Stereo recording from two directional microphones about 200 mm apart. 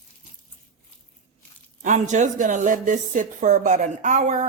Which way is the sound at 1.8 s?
35° right (ahead or behind).